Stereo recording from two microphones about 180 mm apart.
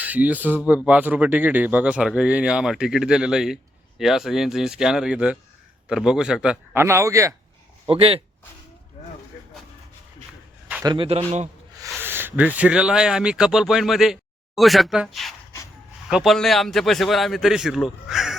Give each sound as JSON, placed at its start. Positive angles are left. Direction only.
{"t": 0.0, "sound": "a man's voice", "side_deg": -10}
{"t": 7.9, "sound": "speech", "side_deg": -30}
{"t": 10.8, "sound": "speech", "side_deg": -30}
{"t": 11.9, "sound": "speech", "side_deg": -10}